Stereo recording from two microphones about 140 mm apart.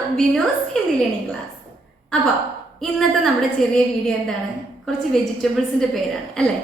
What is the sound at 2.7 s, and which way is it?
Speech, centre (ahead or behind).